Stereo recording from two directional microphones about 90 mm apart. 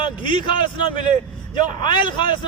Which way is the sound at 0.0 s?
65° left (ahead or behind).